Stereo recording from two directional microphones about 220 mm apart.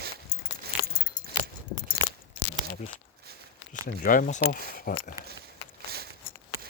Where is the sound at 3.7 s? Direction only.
40° left (ahead or behind).